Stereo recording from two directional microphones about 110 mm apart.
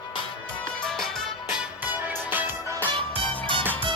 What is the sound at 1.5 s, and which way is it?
Music, 10° right (ahead or behind).